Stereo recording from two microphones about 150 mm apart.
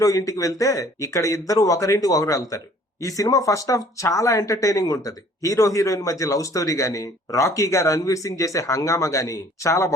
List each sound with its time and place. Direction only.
0.0 s speech: 20° left (ahead or behind)